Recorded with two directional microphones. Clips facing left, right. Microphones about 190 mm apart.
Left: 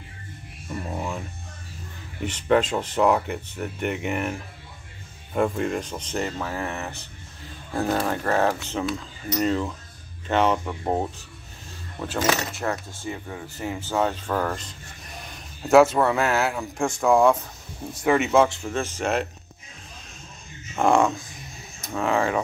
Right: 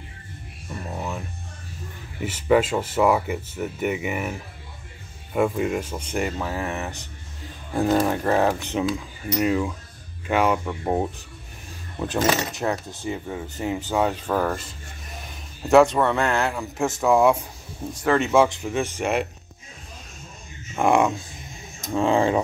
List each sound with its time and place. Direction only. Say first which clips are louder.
0.7 s speech: left 1 dB; centre (ahead or behind)
2.2 s speech: right 2 dB; 5° right (ahead or behind)
10.6 s speech: right 1 dB; centre (ahead or behind)
12.0 s speech: right 2 dB; 15° right (ahead or behind)
18.0 s speech: even; 5° left (ahead or behind)
18.4 s speech: right 1 dB; 10° right (ahead or behind)
20.8 s speech: even; 15° right (ahead or behind)
21.9 s speech: right 3 dB; 30° right (ahead or behind)